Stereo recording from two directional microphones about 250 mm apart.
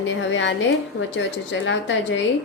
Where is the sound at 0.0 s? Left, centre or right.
Left.